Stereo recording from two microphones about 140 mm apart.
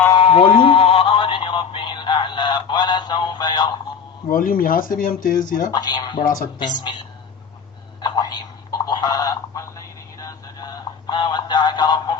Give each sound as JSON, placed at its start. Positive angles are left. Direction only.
{"t": 0.1, "sound": "a sound", "side_deg": 40}
{"t": 4.3, "sound": "speech", "side_deg": 85}
{"t": 5.7, "sound": "speech", "side_deg": 30}
{"t": 6.2, "sound": "speech", "side_deg": 90}
{"t": 8.0, "sound": "telephone", "side_deg": 30}
{"t": 10.2, "sound": "music", "side_deg": 25}